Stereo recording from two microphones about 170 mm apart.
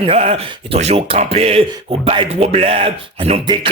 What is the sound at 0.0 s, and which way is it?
Speech, 35° right (ahead or behind).